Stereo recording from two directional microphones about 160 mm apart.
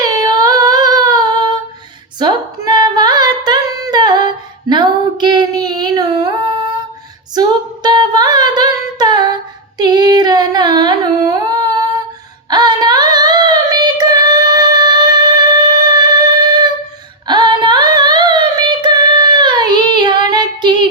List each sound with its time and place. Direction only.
0.0 s child singing: 25° right (ahead or behind)
2.1 s singing: 25° right (ahead or behind)
4.7 s a sound: 30° right (ahead or behind)
7.3 s singing: 25° right (ahead or behind)
9.7 s a sound: 25° right (ahead or behind)
12.5 s child singing: 25° right (ahead or behind)
17.2 s singing: 30° right (ahead or behind)